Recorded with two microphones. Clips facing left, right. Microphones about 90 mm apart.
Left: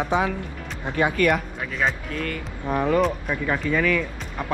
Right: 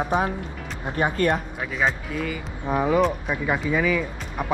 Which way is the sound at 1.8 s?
5° right (ahead or behind).